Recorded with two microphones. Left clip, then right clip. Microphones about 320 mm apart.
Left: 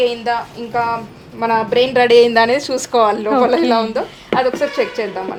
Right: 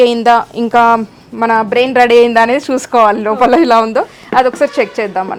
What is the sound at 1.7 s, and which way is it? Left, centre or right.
A woman's voice, right.